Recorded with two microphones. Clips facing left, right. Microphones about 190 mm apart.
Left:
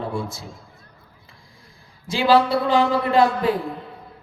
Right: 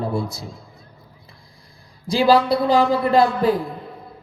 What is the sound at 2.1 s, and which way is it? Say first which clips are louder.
Speech: right 1 dB; 35° right (ahead or behind).